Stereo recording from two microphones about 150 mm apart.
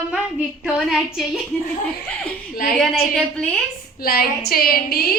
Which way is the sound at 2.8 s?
5° left (ahead or behind).